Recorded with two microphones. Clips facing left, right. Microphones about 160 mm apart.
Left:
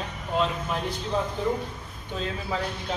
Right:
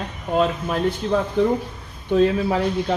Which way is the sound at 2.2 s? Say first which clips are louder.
Right 11 dB; 75° right (ahead or behind).